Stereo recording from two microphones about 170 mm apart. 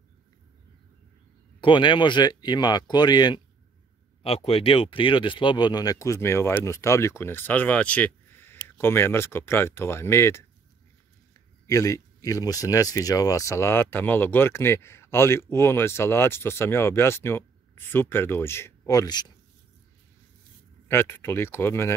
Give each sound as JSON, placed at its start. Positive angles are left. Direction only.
{"t": 1.6, "sound": "speech", "side_deg": 30}
{"t": 4.2, "sound": "speech", "side_deg": 35}
{"t": 11.6, "sound": "speech", "side_deg": 20}
{"t": 20.9, "sound": "speech", "side_deg": 15}